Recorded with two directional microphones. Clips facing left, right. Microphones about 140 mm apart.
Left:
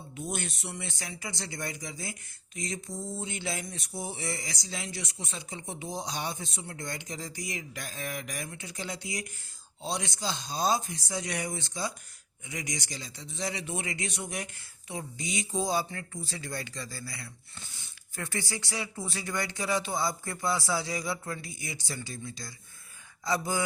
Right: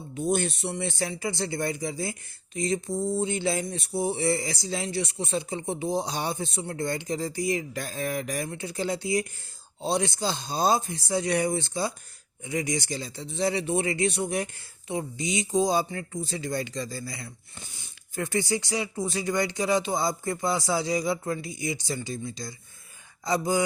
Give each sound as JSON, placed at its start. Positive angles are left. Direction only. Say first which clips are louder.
{"t": 0.1, "sound": "speech", "louder": "right 10 dB", "side_deg": -30}